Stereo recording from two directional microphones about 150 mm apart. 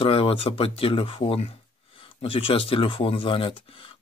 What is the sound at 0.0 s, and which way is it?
Speech, 40° left (ahead or behind).